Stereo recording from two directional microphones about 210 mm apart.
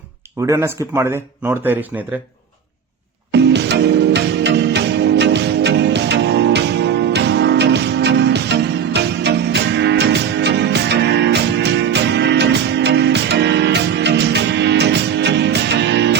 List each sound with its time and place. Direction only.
0.4 s speech: 15° right (ahead or behind)
3.3 s music: 55° right (ahead or behind)